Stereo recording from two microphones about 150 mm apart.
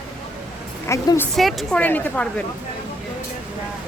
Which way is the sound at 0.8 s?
20° left (ahead or behind).